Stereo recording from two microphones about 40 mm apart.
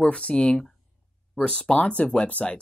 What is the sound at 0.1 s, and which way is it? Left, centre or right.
Speech, left.